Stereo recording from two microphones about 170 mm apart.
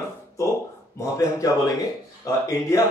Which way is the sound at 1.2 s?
20° left (ahead or behind).